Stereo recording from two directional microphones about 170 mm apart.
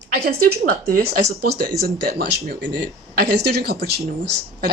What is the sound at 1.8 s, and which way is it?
Speech, 65° right (ahead or behind).